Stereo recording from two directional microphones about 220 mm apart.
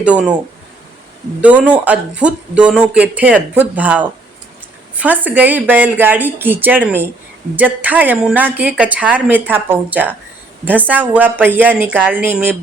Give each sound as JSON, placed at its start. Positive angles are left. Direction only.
{"t": 0.0, "sound": "speech", "side_deg": -5}
{"t": 1.4, "sound": "speech", "side_deg": -5}